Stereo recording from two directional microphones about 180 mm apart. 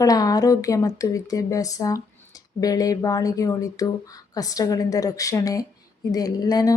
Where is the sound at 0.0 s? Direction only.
20° left (ahead or behind).